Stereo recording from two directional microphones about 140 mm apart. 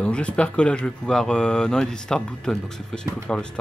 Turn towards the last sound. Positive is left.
turn(degrees=5)  # may be behind; listen again after turning